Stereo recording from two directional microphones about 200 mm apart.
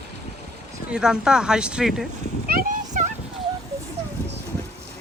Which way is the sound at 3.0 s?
40° right (ahead or behind).